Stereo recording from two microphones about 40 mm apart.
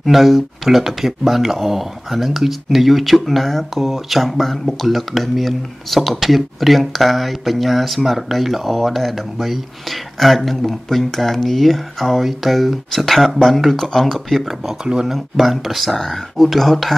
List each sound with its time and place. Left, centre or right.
0.0 s speech: centre
14.7 s speech: centre
15.3 s speech: centre